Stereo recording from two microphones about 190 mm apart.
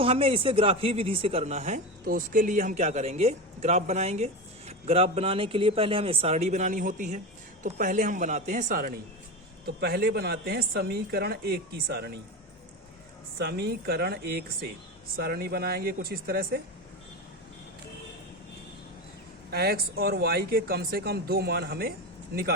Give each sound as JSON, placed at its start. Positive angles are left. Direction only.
{"t": 0.0, "sound": "a woman's voice", "side_deg": -30}
{"t": 13.4, "sound": "a woman's voice", "side_deg": -55}
{"t": 19.5, "sound": "a woman's voice", "side_deg": -55}